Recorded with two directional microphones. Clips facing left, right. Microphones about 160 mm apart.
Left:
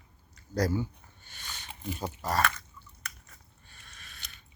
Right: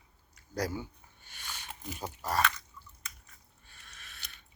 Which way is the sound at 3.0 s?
70° left (ahead or behind).